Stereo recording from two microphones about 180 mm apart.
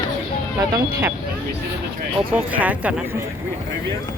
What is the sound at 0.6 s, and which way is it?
Speech, 20° right (ahead or behind).